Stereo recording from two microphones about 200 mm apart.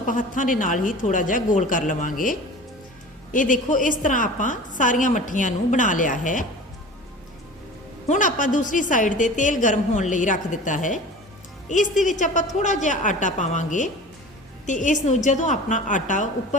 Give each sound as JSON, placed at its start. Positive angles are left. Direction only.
{"t": 0.1, "sound": "a woman's voice", "side_deg": 40}
{"t": 8.0, "sound": "a woman's voice", "side_deg": 40}